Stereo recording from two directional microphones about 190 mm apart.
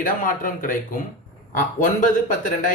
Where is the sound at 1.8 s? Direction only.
45° left (ahead or behind).